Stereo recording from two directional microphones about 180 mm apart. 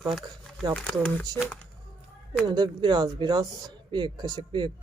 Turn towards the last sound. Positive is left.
turn(degrees=-25)  # may be behind; listen again after turning